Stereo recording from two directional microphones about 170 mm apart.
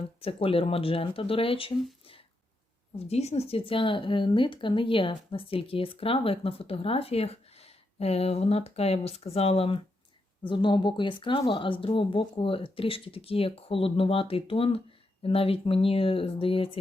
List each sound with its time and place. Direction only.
0.2 s a woman's voice: 35° left (ahead or behind)
3.1 s a woman's voice: 40° left (ahead or behind)